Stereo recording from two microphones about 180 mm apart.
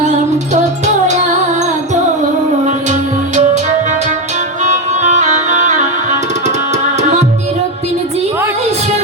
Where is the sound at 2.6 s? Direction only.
40° right (ahead or behind).